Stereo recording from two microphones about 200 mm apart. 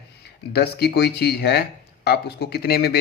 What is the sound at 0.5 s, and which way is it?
A man's voice, 55° left (ahead or behind).